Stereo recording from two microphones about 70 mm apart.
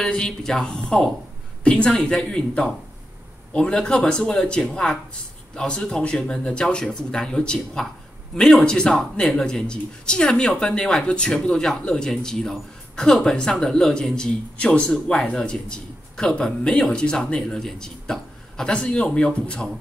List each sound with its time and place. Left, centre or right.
0.0 s a woman's voice: centre